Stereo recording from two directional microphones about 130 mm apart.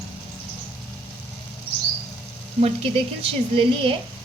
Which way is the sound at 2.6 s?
45° right (ahead or behind).